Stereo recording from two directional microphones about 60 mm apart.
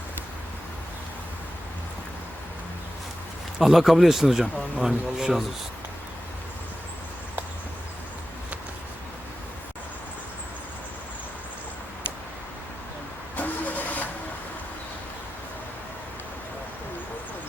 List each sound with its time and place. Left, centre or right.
3.6 s a man's voice: centre
13.3 s vehicle: left